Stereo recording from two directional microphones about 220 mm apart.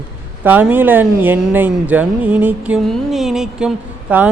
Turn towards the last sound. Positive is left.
turn(degrees=-5)  # may be behind; listen again after turning